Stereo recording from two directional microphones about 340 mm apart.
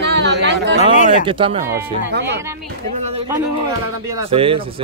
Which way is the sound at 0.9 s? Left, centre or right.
Left.